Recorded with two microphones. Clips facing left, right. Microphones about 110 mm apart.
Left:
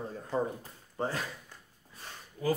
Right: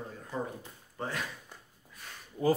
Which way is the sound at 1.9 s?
30° left (ahead or behind).